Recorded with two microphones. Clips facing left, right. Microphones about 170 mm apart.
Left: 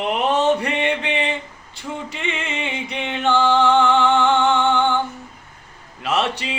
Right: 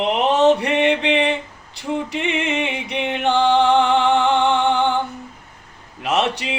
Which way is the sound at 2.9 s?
15° right (ahead or behind).